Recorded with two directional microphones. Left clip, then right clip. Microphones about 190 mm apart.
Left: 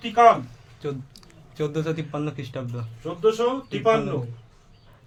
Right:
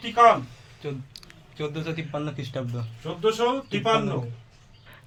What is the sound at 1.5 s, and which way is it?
Speech, 70° left (ahead or behind).